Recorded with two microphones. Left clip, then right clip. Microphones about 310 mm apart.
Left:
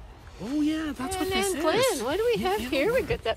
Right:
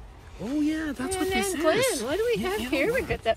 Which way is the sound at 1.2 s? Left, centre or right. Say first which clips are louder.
Even; centre.